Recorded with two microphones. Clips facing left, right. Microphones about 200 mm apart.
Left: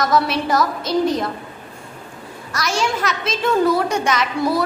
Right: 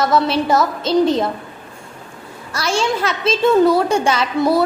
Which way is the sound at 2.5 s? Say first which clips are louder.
Right 3 dB; 30° right (ahead or behind).